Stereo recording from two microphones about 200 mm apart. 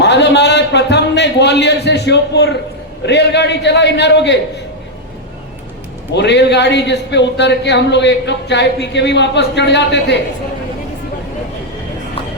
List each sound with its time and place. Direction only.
0.0 s a man's voice: 60° left (ahead or behind)
6.1 s a man's voice: 60° left (ahead or behind)